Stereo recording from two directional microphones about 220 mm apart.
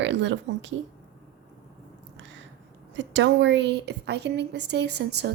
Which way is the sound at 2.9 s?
55° right (ahead or behind).